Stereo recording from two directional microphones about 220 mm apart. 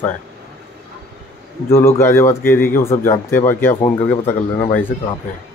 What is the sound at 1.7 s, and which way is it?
Speech, 10° left (ahead or behind).